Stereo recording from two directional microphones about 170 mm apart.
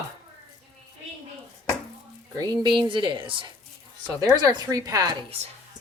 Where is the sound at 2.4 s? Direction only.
25° right (ahead or behind).